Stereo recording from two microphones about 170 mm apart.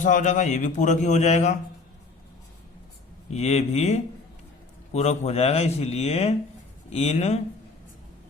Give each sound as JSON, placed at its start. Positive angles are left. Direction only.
{"t": 0.0, "sound": "a man's voice", "side_deg": 50}
{"t": 3.3, "sound": "a man's voice", "side_deg": 40}